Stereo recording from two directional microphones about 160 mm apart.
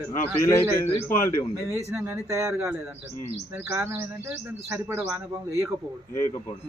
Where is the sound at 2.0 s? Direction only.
20° right (ahead or behind).